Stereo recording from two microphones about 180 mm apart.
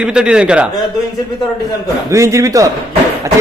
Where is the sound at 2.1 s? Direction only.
15° right (ahead or behind).